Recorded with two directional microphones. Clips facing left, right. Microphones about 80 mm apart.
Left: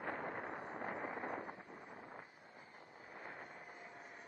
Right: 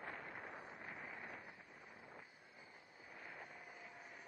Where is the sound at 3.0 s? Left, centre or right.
Left.